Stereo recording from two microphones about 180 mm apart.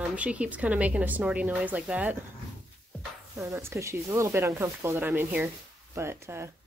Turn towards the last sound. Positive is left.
turn(degrees=-15)  # may be behind; listen again after turning